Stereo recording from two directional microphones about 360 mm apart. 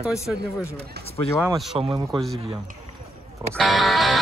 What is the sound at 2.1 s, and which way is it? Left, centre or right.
Speech, centre.